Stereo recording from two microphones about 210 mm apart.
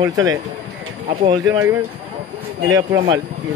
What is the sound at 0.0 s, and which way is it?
Speech, 15° right (ahead or behind).